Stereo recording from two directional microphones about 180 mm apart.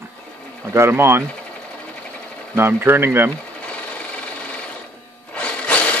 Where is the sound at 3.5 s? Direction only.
5° left (ahead or behind).